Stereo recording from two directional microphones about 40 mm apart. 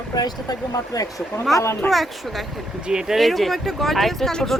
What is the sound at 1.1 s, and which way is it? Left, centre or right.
Speech, centre.